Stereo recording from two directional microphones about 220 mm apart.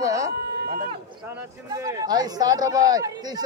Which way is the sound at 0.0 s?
15° right (ahead or behind).